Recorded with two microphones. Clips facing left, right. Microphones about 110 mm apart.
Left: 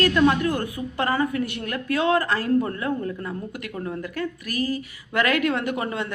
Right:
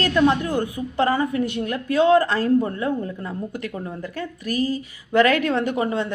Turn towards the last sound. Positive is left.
turn(degrees=-25)  # may be behind; listen again after turning